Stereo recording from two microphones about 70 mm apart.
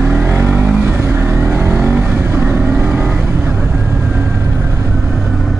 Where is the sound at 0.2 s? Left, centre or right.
Right.